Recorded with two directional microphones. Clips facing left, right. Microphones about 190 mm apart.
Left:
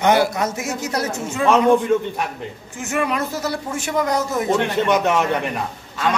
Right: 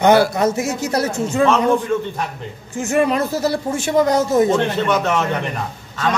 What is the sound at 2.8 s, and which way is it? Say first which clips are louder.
Speech: right 5 dB; 30° right (ahead or behind).